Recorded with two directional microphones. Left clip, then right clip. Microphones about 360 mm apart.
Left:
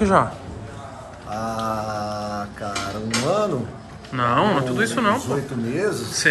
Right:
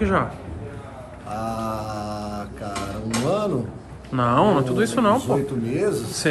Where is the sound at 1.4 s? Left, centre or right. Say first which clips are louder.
Left 3 dB; centre.